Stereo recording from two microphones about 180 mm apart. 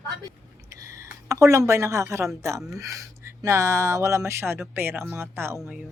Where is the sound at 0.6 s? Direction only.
15° right (ahead or behind).